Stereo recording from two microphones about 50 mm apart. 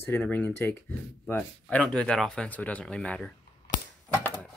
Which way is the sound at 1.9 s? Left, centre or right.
Centre.